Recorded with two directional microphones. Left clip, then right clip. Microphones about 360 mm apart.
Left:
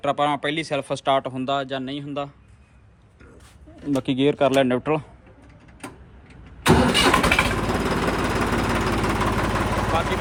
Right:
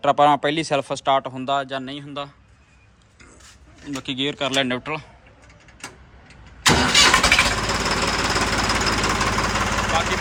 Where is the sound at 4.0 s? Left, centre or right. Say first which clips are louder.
Left 5 dB; centre.